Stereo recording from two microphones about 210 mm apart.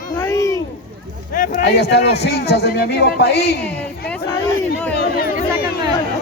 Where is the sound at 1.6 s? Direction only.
55° left (ahead or behind).